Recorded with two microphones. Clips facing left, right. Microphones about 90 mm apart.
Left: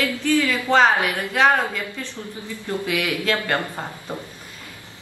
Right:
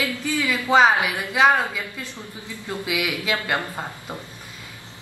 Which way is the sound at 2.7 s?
10° right (ahead or behind).